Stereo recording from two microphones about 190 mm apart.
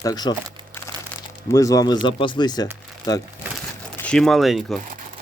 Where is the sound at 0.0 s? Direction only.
20° left (ahead or behind).